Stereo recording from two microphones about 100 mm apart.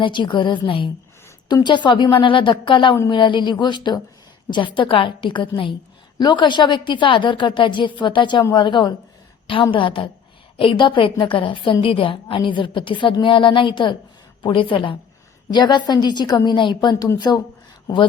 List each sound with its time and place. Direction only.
0.0 s a woman's voice: 50° left (ahead or behind)
15.4 s a woman's voice: 45° left (ahead or behind)